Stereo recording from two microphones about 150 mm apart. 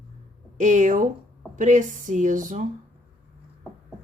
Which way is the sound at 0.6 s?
55° right (ahead or behind).